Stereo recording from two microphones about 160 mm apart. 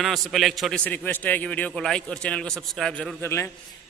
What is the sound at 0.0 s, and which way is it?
A man's voice, centre (ahead or behind).